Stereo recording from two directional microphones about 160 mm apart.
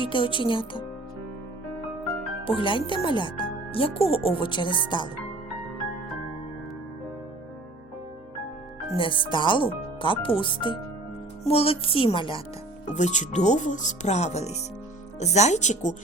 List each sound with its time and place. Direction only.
0.0 s speech: 30° left (ahead or behind)
2.4 s speech: 35° left (ahead or behind)
9.0 s speech: 30° left (ahead or behind)
12.9 s speech: 50° left (ahead or behind)